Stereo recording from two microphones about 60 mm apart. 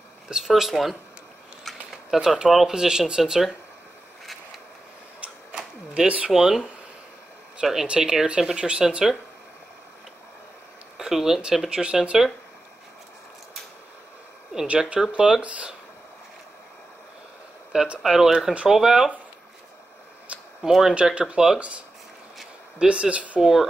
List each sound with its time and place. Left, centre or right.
0.3 s speech: centre
2.1 s speech: centre
5.9 s speech: centre
6.3 s speech: centre
7.8 s speech: centre
11.0 s speech: centre
15.0 s speech: centre
18.0 s speech: centre
20.3 s a sound: right
20.6 s speech: centre
23.4 s speech: centre